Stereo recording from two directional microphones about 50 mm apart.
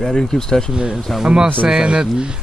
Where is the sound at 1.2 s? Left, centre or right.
Centre.